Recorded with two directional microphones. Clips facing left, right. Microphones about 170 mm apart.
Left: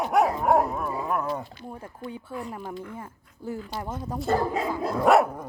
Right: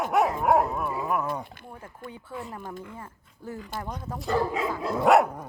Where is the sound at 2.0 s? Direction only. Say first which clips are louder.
Left 5 dB; 50° right (ahead or behind).